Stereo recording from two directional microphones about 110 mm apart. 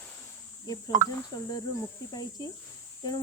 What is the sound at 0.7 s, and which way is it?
Speech, 35° left (ahead or behind).